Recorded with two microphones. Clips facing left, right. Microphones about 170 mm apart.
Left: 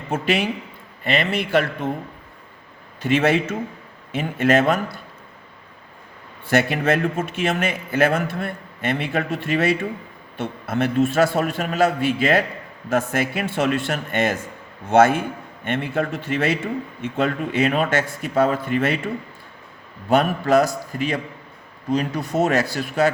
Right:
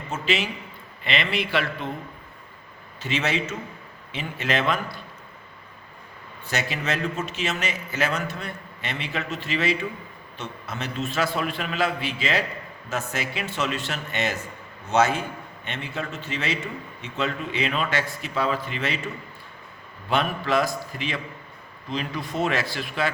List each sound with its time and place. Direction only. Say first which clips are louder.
0.1 s a man's voice: left 5 dB; 55° left (ahead or behind)
3.0 s a man's voice: left 8 dB; 55° left (ahead or behind)
6.5 s a man's voice: left 9 dB; 55° left (ahead or behind)